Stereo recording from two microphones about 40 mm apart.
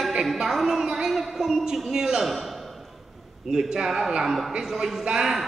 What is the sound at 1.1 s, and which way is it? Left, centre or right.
A man's voice, centre.